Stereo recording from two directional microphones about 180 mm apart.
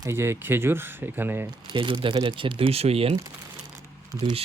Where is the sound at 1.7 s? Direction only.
30° right (ahead or behind).